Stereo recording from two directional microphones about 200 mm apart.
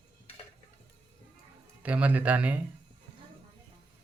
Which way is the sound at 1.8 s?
5° right (ahead or behind).